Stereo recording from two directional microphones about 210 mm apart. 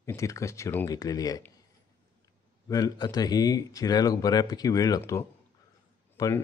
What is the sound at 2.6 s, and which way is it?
Speech, 15° left (ahead or behind).